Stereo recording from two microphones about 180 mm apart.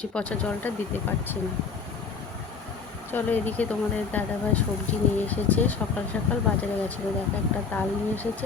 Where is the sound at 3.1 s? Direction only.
10° left (ahead or behind).